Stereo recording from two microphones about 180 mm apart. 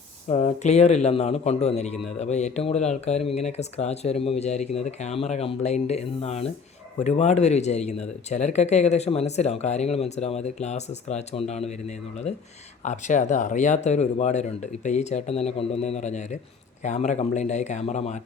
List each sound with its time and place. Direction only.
0.3 s a man's voice: 40° left (ahead or behind)
12.8 s a man's voice: 45° left (ahead or behind)